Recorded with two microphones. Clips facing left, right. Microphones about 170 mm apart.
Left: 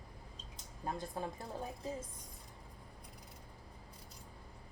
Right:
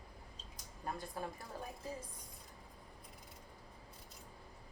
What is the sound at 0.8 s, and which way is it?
Speech, 20° left (ahead or behind).